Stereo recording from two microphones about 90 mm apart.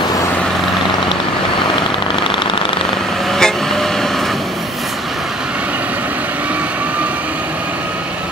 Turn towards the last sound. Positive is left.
turn(degrees=-15)  # may be behind; listen again after turning